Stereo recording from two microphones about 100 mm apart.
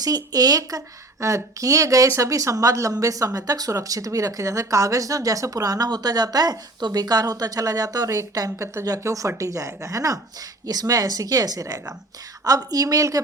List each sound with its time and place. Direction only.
0.0 s speech: 40° right (ahead or behind)